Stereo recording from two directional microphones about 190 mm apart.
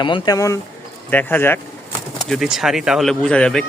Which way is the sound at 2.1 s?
Centre (ahead or behind).